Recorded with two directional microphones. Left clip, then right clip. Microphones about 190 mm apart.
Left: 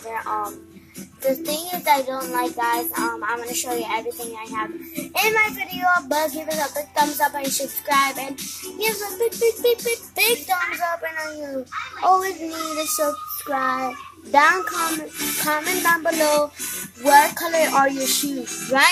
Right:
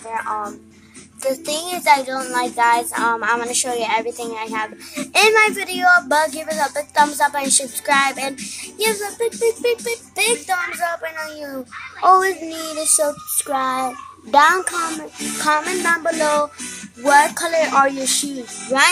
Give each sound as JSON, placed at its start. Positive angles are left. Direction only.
{"t": 1.2, "sound": "child singing", "side_deg": -10}
{"t": 5.1, "sound": "speech", "side_deg": -20}
{"t": 15.4, "sound": "music", "side_deg": -5}
{"t": 17.0, "sound": "speech", "side_deg": -10}